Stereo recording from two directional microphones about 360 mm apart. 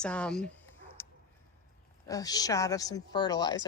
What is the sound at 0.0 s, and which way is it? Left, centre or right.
Speech, centre.